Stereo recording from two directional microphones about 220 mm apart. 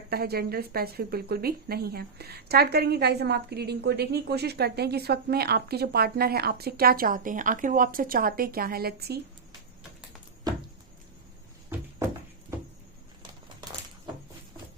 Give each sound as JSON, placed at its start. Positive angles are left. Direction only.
{"t": 0.1, "sound": "a woman's voice", "side_deg": -45}